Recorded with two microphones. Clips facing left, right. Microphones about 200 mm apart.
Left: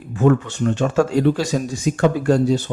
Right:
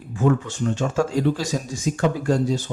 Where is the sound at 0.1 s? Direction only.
65° left (ahead or behind).